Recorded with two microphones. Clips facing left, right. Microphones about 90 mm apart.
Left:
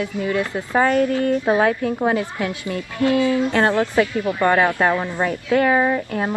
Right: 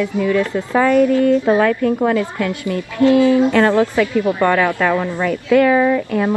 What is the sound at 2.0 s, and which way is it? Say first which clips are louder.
Speech: right 3 dB; 20° left (ahead or behind).